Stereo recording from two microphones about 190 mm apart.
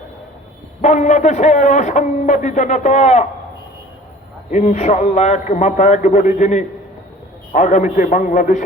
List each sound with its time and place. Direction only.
0.8 s a man's voice: 40° left (ahead or behind)
4.5 s a man's voice: 40° left (ahead or behind)